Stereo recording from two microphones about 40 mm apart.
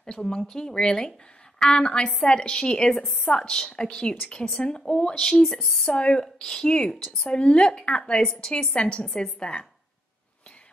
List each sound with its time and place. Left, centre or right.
0.0 s a woman's voice: centre
2.9 s a woman's voice: centre
3.4 s a woman's voice: left
5.4 s speech: centre
5.9 s a woman's voice: left
6.9 s speech: centre
7.2 s a woman's voice: left
8.7 s a woman's voice: left